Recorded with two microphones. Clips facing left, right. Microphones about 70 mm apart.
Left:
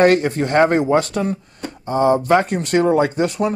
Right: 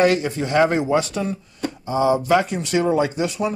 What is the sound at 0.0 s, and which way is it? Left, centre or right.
Speech, left.